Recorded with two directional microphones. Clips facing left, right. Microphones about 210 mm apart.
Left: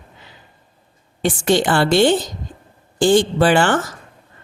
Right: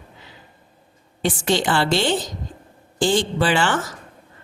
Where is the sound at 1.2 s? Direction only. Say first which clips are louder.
Left 4 dB; 50° left (ahead or behind).